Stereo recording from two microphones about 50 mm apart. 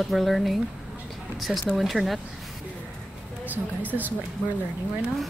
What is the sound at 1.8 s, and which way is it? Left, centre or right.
Speech, centre.